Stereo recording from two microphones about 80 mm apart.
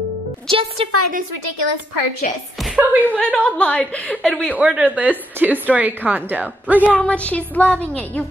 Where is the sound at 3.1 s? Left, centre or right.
Centre.